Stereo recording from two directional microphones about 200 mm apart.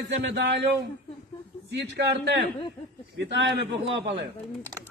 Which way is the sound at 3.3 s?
65° right (ahead or behind).